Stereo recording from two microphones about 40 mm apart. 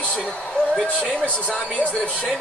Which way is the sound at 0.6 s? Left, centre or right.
Left.